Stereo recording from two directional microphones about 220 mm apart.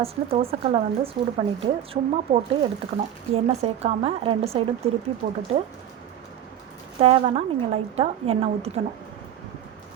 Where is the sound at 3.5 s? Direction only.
30° right (ahead or behind).